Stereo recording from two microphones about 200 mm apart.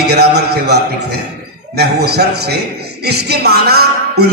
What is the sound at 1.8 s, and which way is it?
A man's voice, 55° right (ahead or behind).